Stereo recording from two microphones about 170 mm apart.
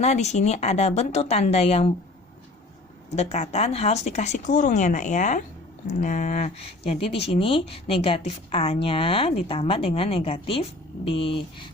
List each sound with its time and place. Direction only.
0.0 s speech: 40° left (ahead or behind)
3.2 s speech: 40° left (ahead or behind)